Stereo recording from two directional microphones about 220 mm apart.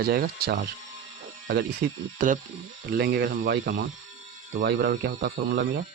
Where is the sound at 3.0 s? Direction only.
45° right (ahead or behind).